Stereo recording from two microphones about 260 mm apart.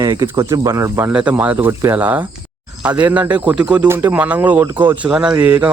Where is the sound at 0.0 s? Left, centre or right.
Centre.